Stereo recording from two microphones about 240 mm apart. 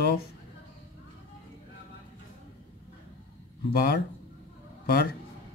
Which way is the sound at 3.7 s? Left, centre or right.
Left.